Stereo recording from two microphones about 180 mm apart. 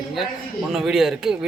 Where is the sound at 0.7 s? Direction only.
Centre (ahead or behind).